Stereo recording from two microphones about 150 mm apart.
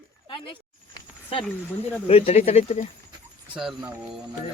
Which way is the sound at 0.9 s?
35° left (ahead or behind).